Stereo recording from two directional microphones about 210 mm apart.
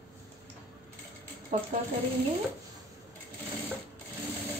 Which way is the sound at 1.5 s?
30° right (ahead or behind).